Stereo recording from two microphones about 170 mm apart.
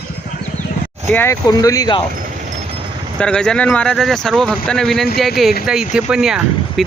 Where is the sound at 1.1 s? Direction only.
15° left (ahead or behind).